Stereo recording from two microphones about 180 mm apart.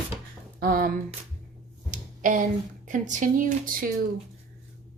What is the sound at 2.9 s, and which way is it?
Speech, 45° right (ahead or behind).